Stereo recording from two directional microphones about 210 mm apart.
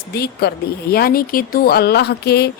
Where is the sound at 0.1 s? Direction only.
50° left (ahead or behind).